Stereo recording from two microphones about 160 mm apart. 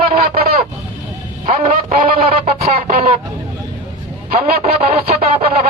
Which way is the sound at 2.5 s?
40° right (ahead or behind).